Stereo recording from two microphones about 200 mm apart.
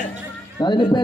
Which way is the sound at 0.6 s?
20° left (ahead or behind).